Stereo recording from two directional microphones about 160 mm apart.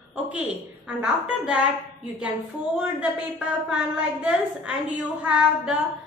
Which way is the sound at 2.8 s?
10° right (ahead or behind).